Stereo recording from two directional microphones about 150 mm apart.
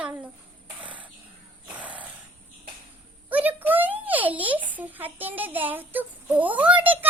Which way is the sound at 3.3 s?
10° right (ahead or behind).